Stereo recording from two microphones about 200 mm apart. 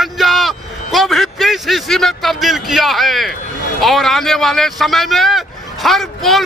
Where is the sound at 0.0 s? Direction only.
Centre (ahead or behind).